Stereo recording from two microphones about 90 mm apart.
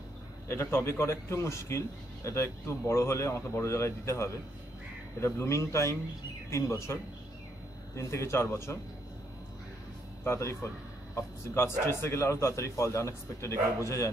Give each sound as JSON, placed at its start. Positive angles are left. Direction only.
{"t": 0.5, "sound": "a man's voice", "side_deg": 30}
{"t": 10.2, "sound": "a man's voice", "side_deg": 30}